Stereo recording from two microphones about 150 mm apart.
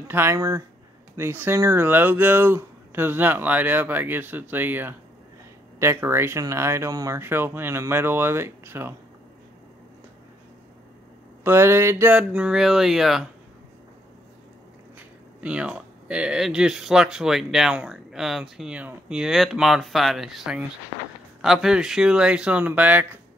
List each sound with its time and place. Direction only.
0.1 s speech: 15° right (ahead or behind)
11.4 s speech: 15° right (ahead or behind)
12.2 s speech: 5° right (ahead or behind)
15.0 s speech: 10° right (ahead or behind)